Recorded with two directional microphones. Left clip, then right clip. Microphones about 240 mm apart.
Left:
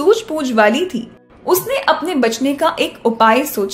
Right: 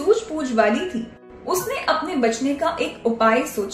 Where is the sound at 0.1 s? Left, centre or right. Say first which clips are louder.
Left 2 dB; left.